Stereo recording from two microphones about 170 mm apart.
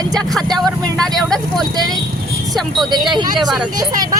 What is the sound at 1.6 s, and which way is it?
Speech, 25° right (ahead or behind).